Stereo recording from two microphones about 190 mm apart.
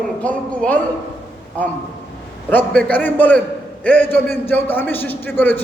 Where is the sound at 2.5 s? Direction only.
10° left (ahead or behind).